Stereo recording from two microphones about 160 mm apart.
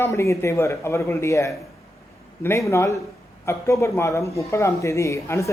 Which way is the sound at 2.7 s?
15° left (ahead or behind).